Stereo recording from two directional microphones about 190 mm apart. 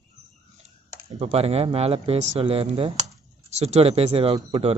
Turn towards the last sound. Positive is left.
turn(degrees=-30)  # may be behind; listen again after turning